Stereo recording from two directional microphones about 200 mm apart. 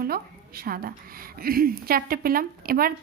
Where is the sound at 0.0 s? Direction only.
50° right (ahead or behind).